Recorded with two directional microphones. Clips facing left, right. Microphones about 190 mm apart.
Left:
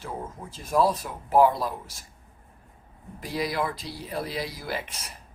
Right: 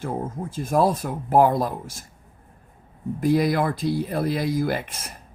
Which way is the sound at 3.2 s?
50° right (ahead or behind).